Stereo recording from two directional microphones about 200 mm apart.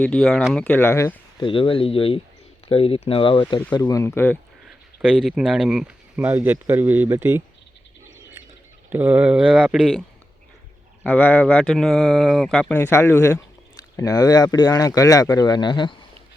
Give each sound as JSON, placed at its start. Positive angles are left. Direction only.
{"t": 0.0, "sound": "speech", "side_deg": 5}
{"t": 1.4, "sound": "speech", "side_deg": 25}
{"t": 5.0, "sound": "speech", "side_deg": -5}
{"t": 8.9, "sound": "speech", "side_deg": -10}
{"t": 11.0, "sound": "speech", "side_deg": 10}